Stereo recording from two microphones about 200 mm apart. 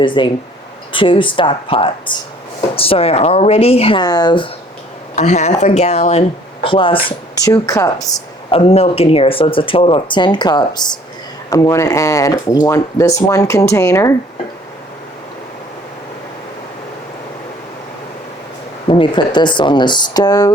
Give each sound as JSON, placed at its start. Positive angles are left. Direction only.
{"t": 0.0, "sound": "speech", "side_deg": 25}
{"t": 5.1, "sound": "speech", "side_deg": 35}
{"t": 8.4, "sound": "speech", "side_deg": 30}
{"t": 18.9, "sound": "speech", "side_deg": 25}